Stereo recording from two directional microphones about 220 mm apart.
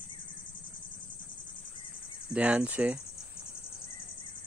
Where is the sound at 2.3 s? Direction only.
5° right (ahead or behind).